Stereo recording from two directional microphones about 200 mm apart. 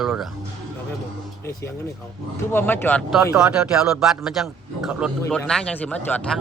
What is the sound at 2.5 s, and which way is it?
Speech, 10° left (ahead or behind).